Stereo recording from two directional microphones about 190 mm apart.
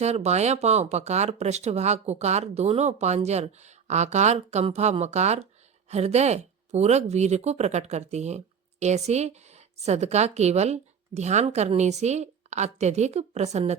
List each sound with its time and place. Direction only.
0.0 s speech: 35° right (ahead or behind)